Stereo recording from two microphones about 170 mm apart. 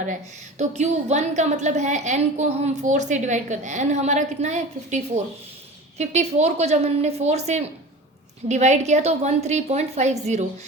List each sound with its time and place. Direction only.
0.6 s a woman's voice: 40° right (ahead or behind)